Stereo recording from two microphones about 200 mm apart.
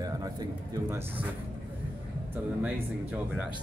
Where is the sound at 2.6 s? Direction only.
5° right (ahead or behind).